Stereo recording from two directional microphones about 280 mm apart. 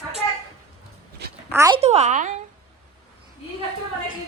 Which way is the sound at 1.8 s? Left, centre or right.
Right.